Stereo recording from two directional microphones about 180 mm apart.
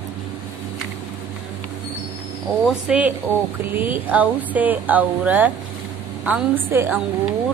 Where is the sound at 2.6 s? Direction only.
5° right (ahead or behind).